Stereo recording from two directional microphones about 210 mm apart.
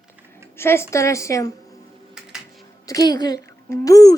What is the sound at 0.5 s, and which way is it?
Speech, 10° left (ahead or behind).